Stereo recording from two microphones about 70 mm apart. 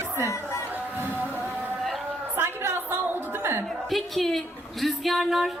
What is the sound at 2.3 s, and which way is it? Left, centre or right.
Music, right.